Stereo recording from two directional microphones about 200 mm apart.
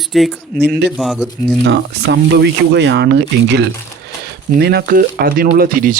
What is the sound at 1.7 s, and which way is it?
Speech, 60° right (ahead or behind).